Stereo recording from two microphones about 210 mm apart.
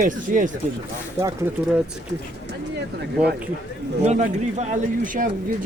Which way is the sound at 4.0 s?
35° right (ahead or behind).